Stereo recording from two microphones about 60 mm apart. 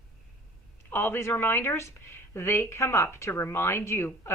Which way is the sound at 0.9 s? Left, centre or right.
Left.